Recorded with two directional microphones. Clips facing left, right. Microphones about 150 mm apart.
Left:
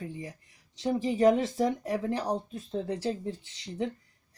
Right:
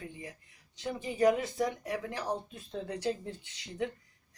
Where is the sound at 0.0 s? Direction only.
35° left (ahead or behind).